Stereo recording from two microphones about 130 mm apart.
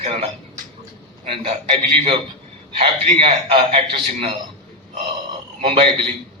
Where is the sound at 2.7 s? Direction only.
45° right (ahead or behind).